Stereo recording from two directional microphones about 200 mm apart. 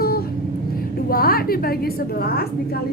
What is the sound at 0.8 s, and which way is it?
A woman's voice, 45° left (ahead or behind).